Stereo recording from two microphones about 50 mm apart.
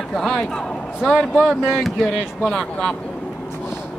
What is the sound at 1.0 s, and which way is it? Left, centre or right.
Speech, centre.